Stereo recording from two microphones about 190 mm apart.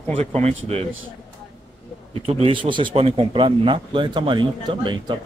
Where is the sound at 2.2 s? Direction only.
30° right (ahead or behind).